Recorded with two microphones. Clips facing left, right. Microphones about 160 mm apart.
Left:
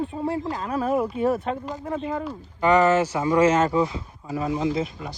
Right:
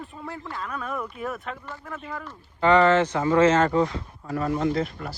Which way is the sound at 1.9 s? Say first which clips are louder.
Left 9 dB; 25° left (ahead or behind).